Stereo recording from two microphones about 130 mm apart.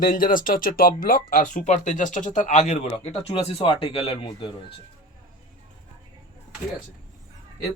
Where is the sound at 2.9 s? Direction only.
45° left (ahead or behind).